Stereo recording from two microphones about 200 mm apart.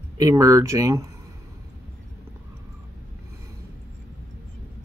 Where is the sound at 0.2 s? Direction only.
15° right (ahead or behind).